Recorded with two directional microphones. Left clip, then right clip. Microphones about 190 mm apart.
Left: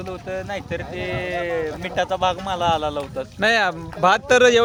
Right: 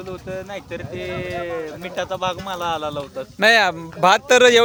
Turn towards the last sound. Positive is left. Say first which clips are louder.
# right 2 dB
turn(degrees=-25)  # may be behind; listen again after turning